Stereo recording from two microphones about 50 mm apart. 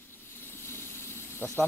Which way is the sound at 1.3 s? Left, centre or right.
Left.